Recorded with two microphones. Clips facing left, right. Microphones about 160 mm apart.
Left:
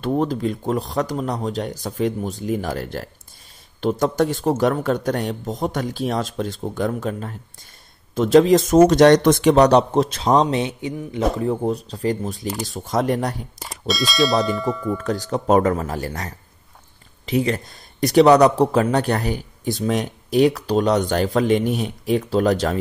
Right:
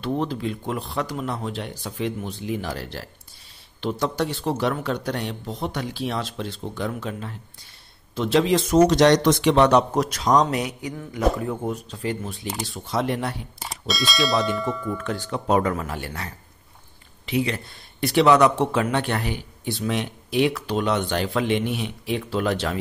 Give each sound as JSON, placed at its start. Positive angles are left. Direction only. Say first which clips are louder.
{"t": 0.0, "sound": "speech", "louder": "left 5 dB", "side_deg": 45}
{"t": 13.6, "sound": "clang", "louder": "left 5 dB", "side_deg": 0}
{"t": 15.0, "sound": "speech", "louder": "left 5 dB", "side_deg": 40}
{"t": 17.3, "sound": "speech", "louder": "left 4 dB", "side_deg": 45}